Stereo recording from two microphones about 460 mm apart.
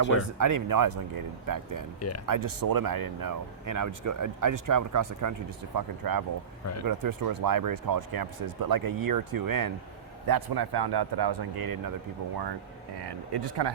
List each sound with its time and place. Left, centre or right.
0.3 s speech: right
2.0 s speech: left
2.2 s speech: right
13.1 s speech: right